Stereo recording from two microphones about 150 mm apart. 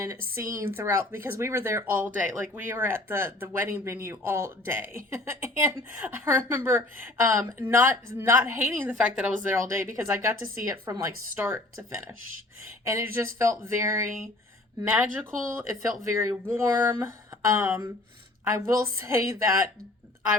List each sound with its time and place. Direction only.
0.3 s speech: 15° right (ahead or behind)